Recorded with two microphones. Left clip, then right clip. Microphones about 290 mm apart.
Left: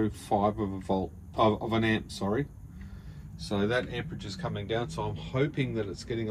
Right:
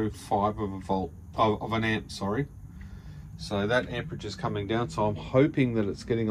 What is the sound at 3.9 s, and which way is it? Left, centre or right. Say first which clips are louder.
Speech: right 2 dB; centre.